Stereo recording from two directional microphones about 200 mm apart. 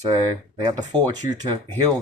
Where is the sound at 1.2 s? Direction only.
40° left (ahead or behind).